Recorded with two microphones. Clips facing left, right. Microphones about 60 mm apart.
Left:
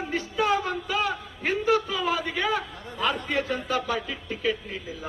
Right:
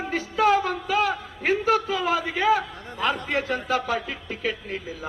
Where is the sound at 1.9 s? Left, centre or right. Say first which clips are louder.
Right 3 dB; right.